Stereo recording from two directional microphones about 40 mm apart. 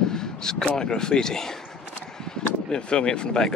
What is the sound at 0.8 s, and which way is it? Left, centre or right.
Speech, centre.